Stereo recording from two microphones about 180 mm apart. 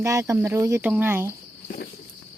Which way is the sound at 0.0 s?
15° right (ahead or behind).